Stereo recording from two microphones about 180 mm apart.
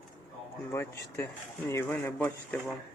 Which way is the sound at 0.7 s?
15° left (ahead or behind).